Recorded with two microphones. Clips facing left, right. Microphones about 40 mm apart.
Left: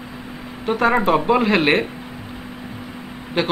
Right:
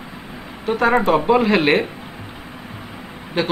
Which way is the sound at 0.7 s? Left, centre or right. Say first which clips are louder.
Right 1 dB; centre.